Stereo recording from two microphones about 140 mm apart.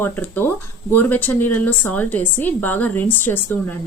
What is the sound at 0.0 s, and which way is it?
Speech, 15° left (ahead or behind).